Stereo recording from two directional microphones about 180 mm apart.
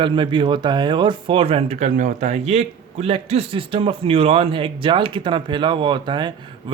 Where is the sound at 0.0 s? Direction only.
25° right (ahead or behind).